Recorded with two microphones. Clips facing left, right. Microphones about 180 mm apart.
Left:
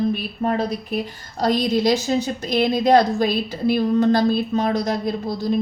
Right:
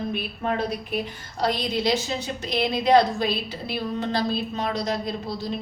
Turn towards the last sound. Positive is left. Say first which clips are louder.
# left 7 dB
turn(degrees=45)  # may be behind; listen again after turning